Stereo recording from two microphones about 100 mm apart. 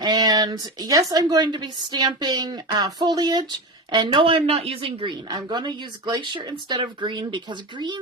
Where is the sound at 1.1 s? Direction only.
40° right (ahead or behind).